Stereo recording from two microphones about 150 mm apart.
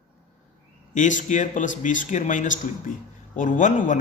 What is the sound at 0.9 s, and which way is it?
A man's voice, 55° left (ahead or behind).